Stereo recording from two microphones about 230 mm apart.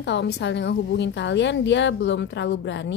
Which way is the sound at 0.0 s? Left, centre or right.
Left.